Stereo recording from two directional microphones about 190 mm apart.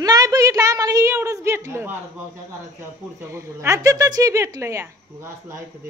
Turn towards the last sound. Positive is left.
turn(degrees=-15)  # may be behind; listen again after turning